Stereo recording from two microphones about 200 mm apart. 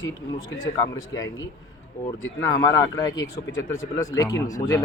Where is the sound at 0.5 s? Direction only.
85° left.